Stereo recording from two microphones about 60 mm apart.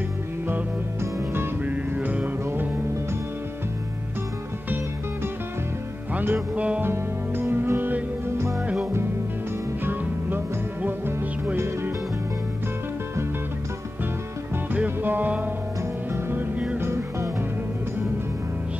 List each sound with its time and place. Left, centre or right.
1.6 s music: right
6.1 s music: right
6.8 s music: right
9.8 s music: right
14.7 s music: right
16.1 s music: right